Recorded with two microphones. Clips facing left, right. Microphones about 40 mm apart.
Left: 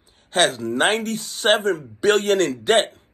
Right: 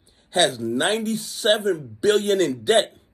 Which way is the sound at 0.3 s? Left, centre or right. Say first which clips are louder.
Left 1 dB; left.